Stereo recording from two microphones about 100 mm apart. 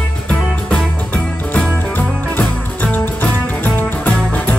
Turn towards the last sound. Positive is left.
turn(degrees=15)  # may be behind; listen again after turning